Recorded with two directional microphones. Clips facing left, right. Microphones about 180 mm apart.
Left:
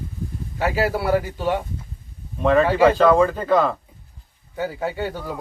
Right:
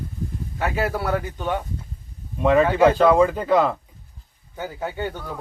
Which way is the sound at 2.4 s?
10° right (ahead or behind).